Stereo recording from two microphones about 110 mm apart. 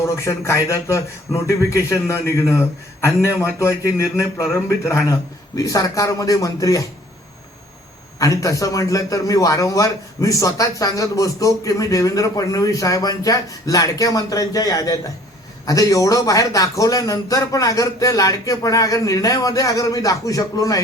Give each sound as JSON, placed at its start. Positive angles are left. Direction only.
{"t": 0.0, "sound": "a man's voice", "side_deg": 25}
{"t": 5.5, "sound": "a man's voice", "side_deg": 30}
{"t": 8.2, "sound": "a man's voice", "side_deg": 30}